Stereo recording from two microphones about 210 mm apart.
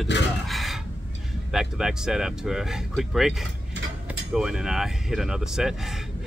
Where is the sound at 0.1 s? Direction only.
55° left (ahead or behind).